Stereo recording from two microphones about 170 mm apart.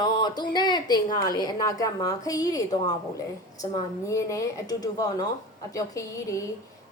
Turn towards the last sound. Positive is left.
turn(degrees=20)  # may be behind; listen again after turning